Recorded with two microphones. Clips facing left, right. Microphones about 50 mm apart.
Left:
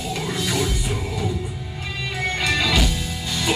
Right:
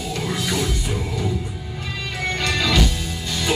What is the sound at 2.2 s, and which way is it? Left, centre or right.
Music, centre.